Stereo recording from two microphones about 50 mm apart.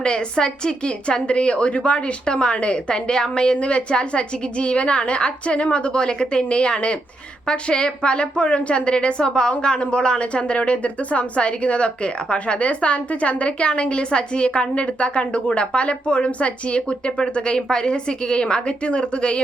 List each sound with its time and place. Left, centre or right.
0.0 s a woman's voice: centre